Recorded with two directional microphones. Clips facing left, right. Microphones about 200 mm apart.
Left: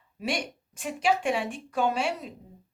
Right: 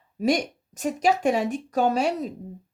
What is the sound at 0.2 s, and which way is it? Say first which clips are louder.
Speech: right 8 dB; 40° right (ahead or behind).